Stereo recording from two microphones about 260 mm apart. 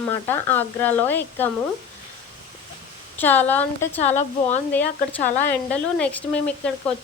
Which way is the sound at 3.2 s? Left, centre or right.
Centre.